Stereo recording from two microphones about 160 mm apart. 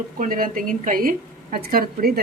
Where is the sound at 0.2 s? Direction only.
60° right (ahead or behind).